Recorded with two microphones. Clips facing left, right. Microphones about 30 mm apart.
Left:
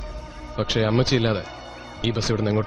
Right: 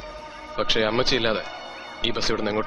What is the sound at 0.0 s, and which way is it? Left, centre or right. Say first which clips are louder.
Speech: right 1 dB; centre.